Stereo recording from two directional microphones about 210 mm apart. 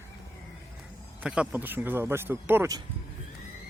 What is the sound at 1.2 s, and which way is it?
Speech, 5° right (ahead or behind).